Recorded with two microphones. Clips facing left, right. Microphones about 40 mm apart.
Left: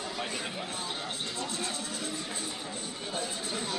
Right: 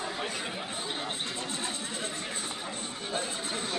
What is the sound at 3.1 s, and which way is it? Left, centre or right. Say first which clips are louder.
Chatter: right 2 dB; right.